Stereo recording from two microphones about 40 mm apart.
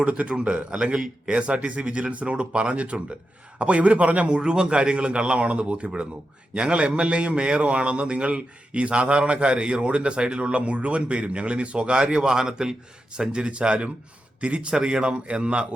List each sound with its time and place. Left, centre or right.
0.0 s a man's voice: right